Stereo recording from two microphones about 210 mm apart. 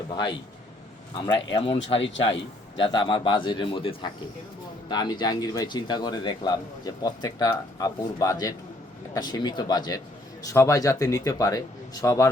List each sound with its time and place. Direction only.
0.1 s speech: 20° left (ahead or behind)
2.9 s a man's voice: 20° left (ahead or behind)